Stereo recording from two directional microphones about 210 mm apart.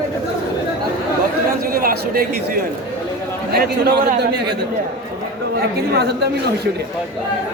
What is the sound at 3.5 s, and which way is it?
A man's voice, 50° right (ahead or behind).